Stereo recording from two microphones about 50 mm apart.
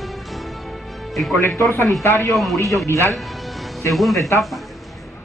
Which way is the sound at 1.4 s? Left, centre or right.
Left.